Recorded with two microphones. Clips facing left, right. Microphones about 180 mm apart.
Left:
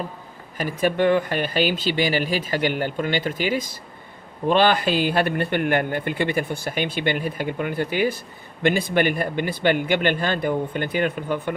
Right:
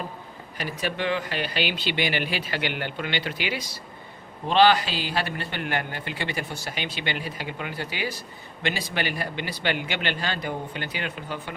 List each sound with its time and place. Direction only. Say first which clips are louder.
0.5 s speech: left 8 dB; 50° left (ahead or behind)